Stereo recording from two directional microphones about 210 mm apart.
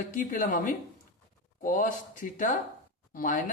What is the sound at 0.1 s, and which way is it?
Speech, 40° left (ahead or behind).